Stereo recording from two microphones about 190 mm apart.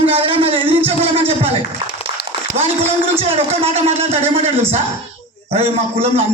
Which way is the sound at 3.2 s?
30° right (ahead or behind).